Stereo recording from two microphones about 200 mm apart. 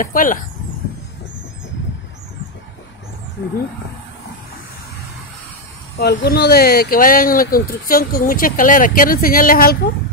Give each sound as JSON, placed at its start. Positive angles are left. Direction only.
{"t": 0.0, "sound": "speech", "side_deg": 45}
{"t": 5.9, "sound": "speech", "side_deg": 55}